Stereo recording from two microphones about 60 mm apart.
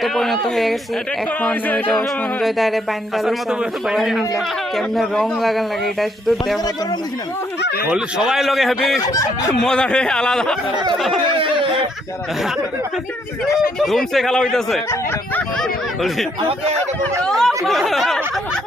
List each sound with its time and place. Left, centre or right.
0.0 s a man's voice: centre
1.4 s speech: left
2.4 s a man's voice: centre
3.9 s a man's voice: centre
8.2 s a man's voice: centre
9.6 s speech: centre
10.9 s a man's voice: centre
13.7 s a man's voice: centre
16.0 s a man's voice: centre
17.2 s a man's voice: centre